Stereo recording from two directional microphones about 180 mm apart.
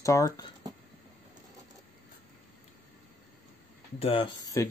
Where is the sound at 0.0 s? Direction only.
20° left (ahead or behind).